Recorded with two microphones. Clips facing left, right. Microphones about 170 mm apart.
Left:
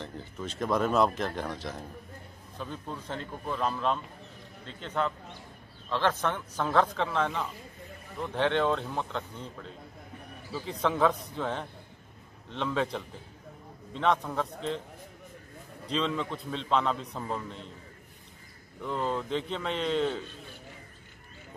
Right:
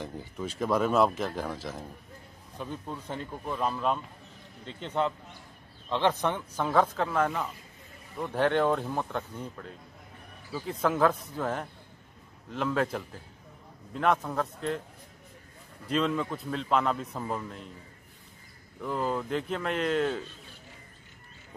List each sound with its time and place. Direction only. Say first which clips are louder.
0.0 s speech: right 2 dB; 10° right (ahead or behind)
4.6 s speech: right 2 dB; 20° right (ahead or behind); by 14.8 s 5° right (ahead or behind)
15.9 s speech: right 2 dB; 5° right (ahead or behind)
18.8 s speech: right 1 dB; 5° right (ahead or behind)